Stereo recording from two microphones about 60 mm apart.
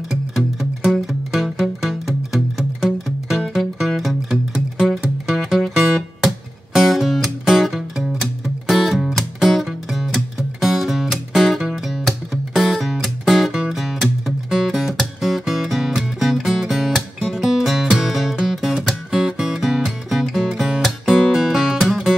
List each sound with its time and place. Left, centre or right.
1.0 s music: centre